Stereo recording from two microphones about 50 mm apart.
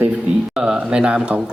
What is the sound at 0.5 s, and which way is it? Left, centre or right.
Speech, centre.